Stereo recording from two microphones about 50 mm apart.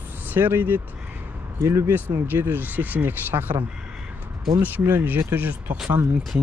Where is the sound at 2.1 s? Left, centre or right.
Right.